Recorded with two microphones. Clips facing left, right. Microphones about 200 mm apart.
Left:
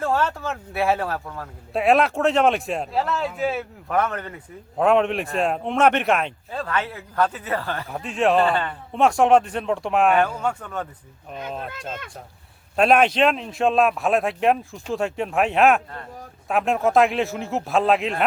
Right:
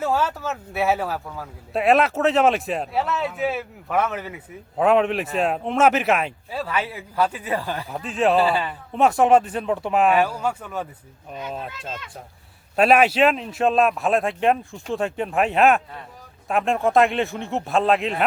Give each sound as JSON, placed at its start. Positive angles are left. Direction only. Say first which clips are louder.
{"t": 0.0, "sound": "speech", "louder": "even", "side_deg": -5}
{"t": 7.9, "sound": "speech", "louder": "even", "side_deg": 0}
{"t": 12.7, "sound": "speech", "louder": "right 1 dB", "side_deg": -5}